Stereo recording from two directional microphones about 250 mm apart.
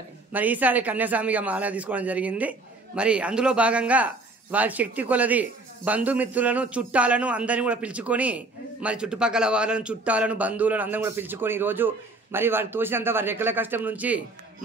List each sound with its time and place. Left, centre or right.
0.3 s speech: centre